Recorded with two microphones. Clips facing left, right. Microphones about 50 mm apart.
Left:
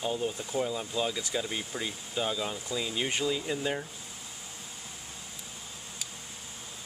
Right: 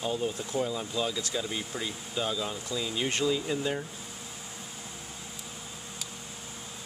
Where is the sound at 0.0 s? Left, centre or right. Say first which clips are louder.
Right 1 dB; centre.